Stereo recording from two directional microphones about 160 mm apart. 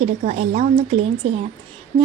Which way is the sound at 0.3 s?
45° right (ahead or behind).